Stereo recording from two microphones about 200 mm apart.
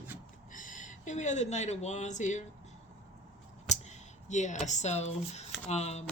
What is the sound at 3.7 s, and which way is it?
Speech, 35° left (ahead or behind).